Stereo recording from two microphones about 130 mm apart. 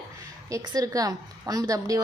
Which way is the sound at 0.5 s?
25° right (ahead or behind).